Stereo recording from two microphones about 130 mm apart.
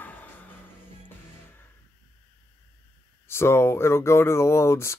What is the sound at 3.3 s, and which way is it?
Speech, 20° left (ahead or behind).